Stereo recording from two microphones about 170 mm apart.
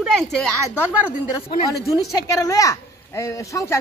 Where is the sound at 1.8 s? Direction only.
20° left (ahead or behind).